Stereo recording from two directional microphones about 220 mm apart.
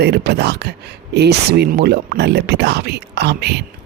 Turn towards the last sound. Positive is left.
turn(degrees=-50)  # may be behind; listen again after turning